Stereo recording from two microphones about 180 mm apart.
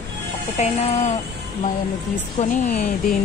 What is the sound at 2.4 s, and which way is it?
Speech, 40° left (ahead or behind).